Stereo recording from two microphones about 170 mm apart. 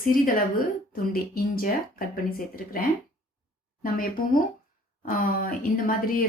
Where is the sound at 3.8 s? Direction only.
55° left (ahead or behind).